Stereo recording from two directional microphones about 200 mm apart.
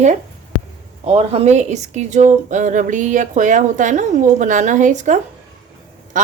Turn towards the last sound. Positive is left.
turn(degrees=-40)  # may be behind; listen again after turning